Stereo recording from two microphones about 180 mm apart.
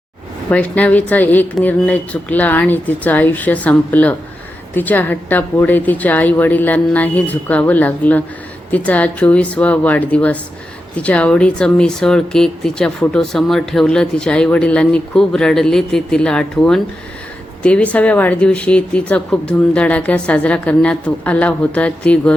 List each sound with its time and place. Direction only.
0.5 s a woman's voice: 10° left (ahead or behind)